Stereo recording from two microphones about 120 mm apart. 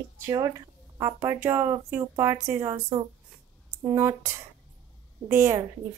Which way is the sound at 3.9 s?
20° right (ahead or behind).